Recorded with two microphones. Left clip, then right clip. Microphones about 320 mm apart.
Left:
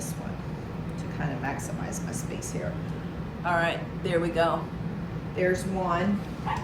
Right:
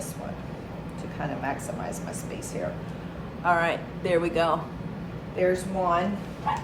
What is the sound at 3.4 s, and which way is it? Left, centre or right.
Speech, centre.